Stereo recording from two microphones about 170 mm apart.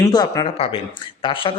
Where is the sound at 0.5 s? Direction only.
35° left (ahead or behind).